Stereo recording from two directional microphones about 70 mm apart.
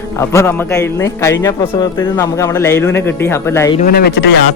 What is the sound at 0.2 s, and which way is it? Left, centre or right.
A man's voice, left.